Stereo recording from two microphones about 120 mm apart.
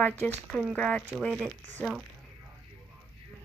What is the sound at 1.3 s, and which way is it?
Speech, centre (ahead or behind).